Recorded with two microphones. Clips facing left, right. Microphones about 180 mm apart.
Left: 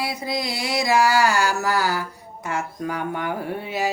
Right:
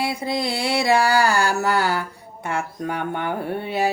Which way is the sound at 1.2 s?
30° right (ahead or behind).